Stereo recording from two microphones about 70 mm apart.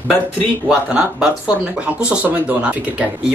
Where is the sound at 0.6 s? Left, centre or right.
Centre.